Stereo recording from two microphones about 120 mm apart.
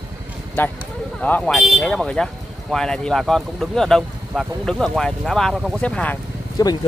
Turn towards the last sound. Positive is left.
turn(degrees=30)  # may be behind; listen again after turning